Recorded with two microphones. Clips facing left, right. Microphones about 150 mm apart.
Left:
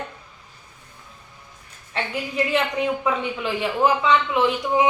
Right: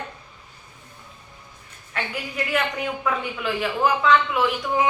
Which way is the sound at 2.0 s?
30° left (ahead or behind).